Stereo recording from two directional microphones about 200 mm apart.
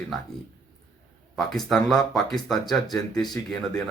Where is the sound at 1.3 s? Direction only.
Centre (ahead or behind).